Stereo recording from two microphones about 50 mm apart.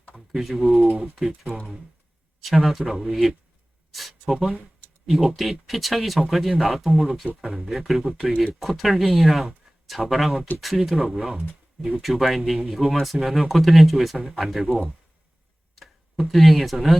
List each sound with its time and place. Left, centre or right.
0.1 s typing: centre
0.8 s speech: centre
2.4 s speech: centre